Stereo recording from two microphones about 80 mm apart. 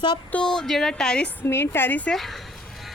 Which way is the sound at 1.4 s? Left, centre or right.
Left.